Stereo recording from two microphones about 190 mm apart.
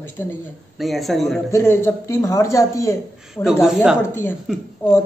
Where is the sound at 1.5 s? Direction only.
15° left (ahead or behind).